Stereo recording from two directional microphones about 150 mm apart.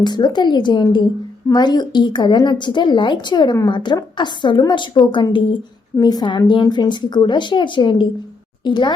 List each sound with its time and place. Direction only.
0.0 s speech: 30° left (ahead or behind)